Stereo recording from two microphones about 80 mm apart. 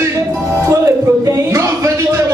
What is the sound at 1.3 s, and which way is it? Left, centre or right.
Speech, right.